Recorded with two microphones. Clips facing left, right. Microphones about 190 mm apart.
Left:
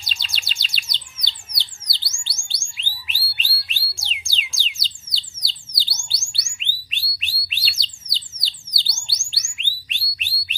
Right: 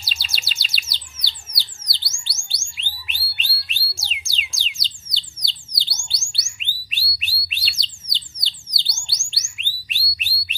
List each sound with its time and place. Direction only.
0.0 s bird: 5° right (ahead or behind)
2.2 s music: centre (ahead or behind)
2.8 s a sound: centre (ahead or behind)
8.7 s bird: centre (ahead or behind)